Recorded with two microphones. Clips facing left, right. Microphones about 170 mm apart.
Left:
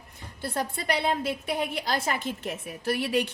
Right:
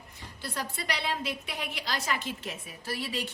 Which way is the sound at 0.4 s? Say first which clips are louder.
Left 6 dB; 50° left (ahead or behind).